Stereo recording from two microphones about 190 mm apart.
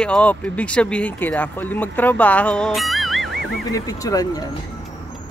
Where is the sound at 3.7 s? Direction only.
20° left (ahead or behind).